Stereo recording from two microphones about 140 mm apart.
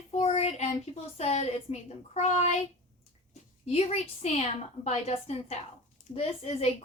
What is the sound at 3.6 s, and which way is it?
A woman's voice, 50° left (ahead or behind).